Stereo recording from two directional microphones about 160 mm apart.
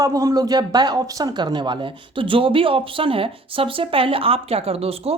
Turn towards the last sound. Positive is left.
turn(degrees=-40)  # may be behind; listen again after turning